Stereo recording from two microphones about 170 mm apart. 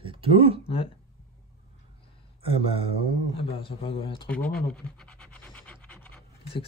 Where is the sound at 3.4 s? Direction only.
35° left (ahead or behind).